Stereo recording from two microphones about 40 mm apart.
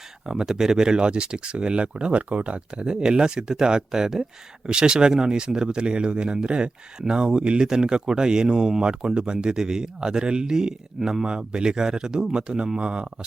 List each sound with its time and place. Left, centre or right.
0.3 s speech: centre